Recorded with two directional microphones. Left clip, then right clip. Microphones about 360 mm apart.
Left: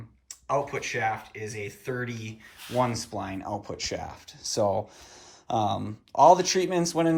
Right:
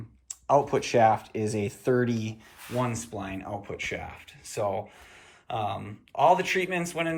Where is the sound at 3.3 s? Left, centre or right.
Left.